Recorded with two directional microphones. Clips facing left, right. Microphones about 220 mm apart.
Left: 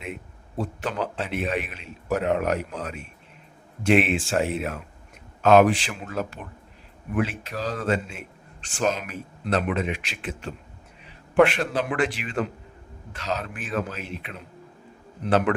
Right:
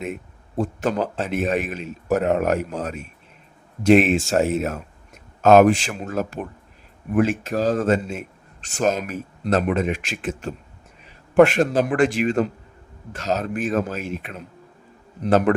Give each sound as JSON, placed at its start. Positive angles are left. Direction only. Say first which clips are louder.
{"t": 0.0, "sound": "a man's voice", "louder": "right 6 dB", "side_deg": -45}